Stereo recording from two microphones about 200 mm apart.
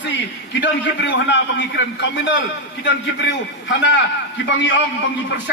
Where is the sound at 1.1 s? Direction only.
65° left (ahead or behind).